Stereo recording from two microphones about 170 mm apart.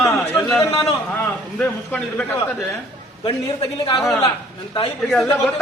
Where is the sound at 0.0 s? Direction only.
20° left (ahead or behind).